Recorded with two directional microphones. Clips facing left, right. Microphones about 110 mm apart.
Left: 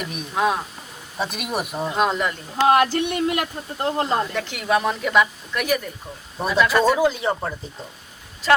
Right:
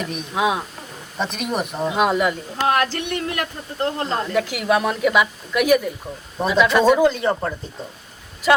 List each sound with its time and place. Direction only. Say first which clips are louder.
0.0 s speech: right 1 dB; centre (ahead or behind)
2.6 s speech: left 5 dB; 20° left (ahead or behind)
4.4 s speech: right 3 dB; 5° right (ahead or behind)